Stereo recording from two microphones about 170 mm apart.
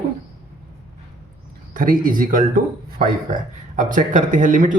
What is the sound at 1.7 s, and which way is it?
Speech, 55° right (ahead or behind).